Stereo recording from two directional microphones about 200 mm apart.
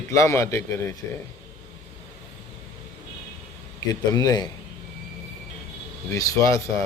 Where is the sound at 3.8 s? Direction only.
15° left (ahead or behind).